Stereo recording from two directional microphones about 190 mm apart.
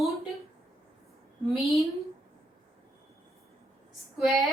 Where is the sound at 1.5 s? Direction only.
Centre (ahead or behind).